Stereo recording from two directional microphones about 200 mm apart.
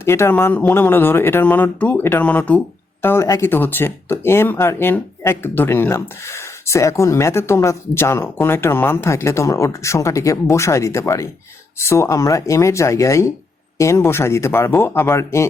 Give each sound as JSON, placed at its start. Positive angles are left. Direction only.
{"t": 0.0, "sound": "speech", "side_deg": 10}